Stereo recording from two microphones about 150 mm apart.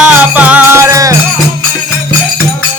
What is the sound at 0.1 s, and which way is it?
Music, 10° right (ahead or behind).